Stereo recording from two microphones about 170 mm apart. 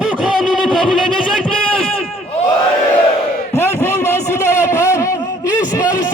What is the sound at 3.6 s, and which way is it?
Vehicle, 15° left (ahead or behind).